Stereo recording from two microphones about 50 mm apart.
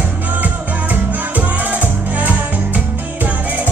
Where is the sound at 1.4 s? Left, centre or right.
Right.